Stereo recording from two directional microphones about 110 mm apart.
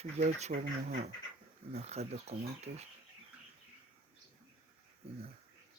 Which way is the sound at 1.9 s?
75° right (ahead or behind).